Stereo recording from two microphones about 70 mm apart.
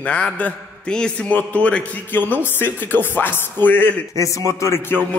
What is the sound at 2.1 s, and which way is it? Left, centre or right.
Speech, left.